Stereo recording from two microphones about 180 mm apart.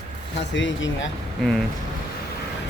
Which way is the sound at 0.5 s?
90° left.